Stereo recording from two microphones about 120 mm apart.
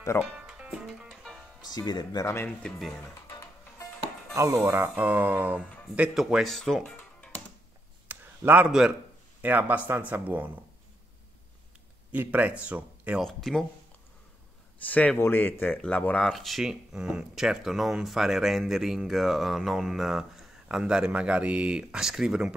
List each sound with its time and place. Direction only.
0.2 s music: 5° right (ahead or behind)
1.7 s speech: 35° left (ahead or behind)
2.2 s speech: 20° left (ahead or behind)
3.3 s music: 20° left (ahead or behind)
4.4 s speech: 25° right (ahead or behind)
5.9 s speech: 5° right (ahead or behind)
8.1 s a sound: 15° right (ahead or behind)
9.4 s speech: 15° right (ahead or behind)
12.1 s speech: 15° right (ahead or behind)
13.2 s speech: centre (ahead or behind)
14.8 s speech: 10° left (ahead or behind); by 22.5 s 5° right (ahead or behind)